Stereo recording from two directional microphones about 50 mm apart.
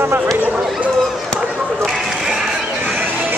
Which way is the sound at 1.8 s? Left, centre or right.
Centre.